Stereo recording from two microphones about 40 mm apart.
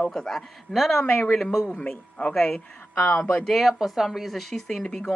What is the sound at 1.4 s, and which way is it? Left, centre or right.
Speech, centre.